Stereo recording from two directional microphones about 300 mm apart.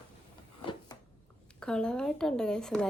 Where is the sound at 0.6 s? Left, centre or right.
Centre.